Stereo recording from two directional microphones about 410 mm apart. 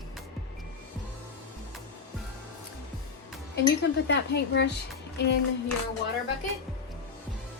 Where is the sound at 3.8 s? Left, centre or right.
Left.